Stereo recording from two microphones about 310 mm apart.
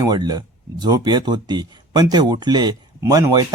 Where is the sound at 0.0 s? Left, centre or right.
Centre.